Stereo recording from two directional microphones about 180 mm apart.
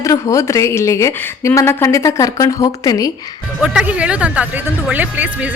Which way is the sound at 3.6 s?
5° right (ahead or behind).